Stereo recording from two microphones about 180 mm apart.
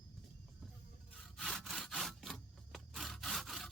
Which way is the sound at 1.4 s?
Centre (ahead or behind).